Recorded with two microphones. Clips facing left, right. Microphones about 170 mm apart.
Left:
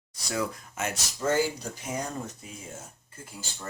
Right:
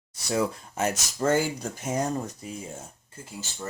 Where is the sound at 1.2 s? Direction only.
50° right (ahead or behind).